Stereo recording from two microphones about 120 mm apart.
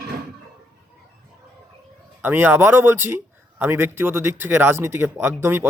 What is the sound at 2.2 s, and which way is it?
A man's voice, 15° right (ahead or behind).